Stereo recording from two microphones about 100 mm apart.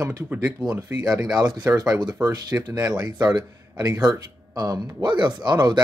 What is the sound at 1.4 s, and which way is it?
Speech, 40° right (ahead or behind).